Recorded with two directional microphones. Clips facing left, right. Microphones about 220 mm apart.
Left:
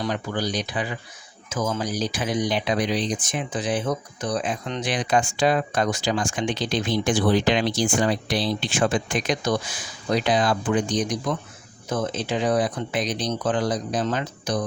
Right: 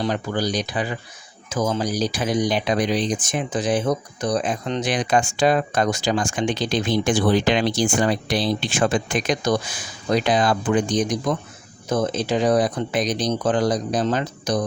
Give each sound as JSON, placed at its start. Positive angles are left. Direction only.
{"t": 0.0, "sound": "speech", "side_deg": -35}